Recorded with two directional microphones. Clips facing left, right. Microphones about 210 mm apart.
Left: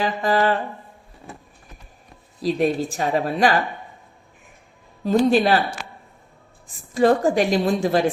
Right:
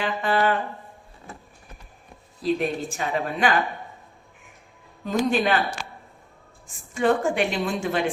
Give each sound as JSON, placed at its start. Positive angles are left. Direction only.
{"t": 0.0, "sound": "a woman's voice", "side_deg": 40}
{"t": 2.4, "sound": "a woman's voice", "side_deg": 35}
{"t": 5.0, "sound": "a woman's voice", "side_deg": 35}
{"t": 6.9, "sound": "a woman's voice", "side_deg": 35}